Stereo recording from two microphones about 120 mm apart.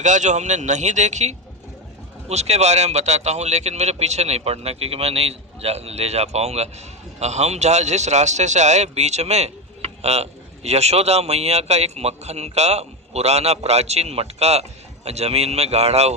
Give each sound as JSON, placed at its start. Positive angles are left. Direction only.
{"t": 0.0, "sound": "speech", "side_deg": -90}